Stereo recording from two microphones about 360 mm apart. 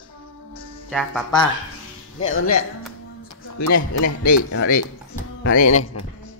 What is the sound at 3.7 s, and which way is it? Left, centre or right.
Speech, left.